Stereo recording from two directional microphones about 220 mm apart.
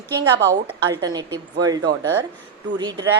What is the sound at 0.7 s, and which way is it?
A woman's voice, 15° right (ahead or behind).